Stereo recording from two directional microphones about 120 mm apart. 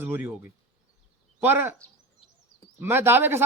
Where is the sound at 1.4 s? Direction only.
15° right (ahead or behind).